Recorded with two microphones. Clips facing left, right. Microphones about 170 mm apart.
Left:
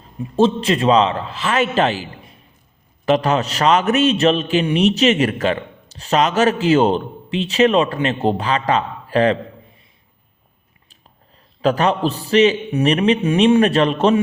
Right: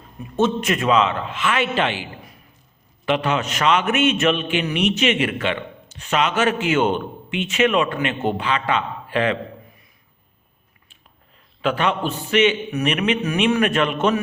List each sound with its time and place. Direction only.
0.2 s a man's voice: 30° left (ahead or behind)
3.1 s a man's voice: 40° left (ahead or behind)
11.6 s a man's voice: 40° left (ahead or behind)